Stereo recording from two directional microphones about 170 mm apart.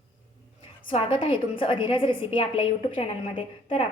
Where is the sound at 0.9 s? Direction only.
30° left (ahead or behind).